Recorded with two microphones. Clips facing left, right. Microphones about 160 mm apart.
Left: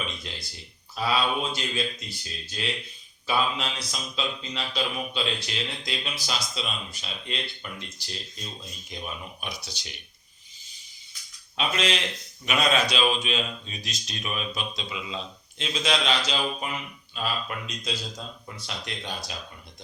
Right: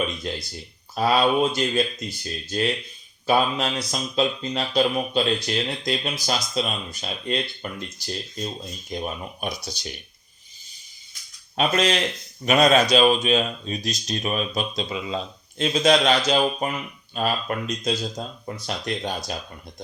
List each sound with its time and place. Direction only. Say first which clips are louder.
0.9 s speech: right 7 dB; 50° right (ahead or behind)
11.5 s speech: right 6 dB; 45° right (ahead or behind)